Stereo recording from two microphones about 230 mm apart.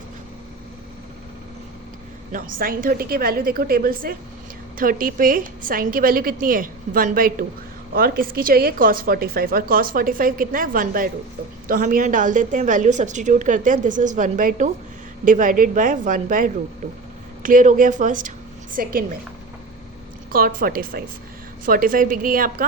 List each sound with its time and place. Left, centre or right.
2.3 s speech: right
20.3 s speech: right